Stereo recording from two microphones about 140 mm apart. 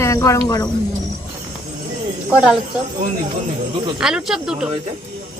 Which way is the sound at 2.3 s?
5° right (ahead or behind).